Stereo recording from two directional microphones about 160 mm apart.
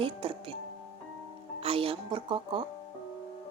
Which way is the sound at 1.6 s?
35° right (ahead or behind).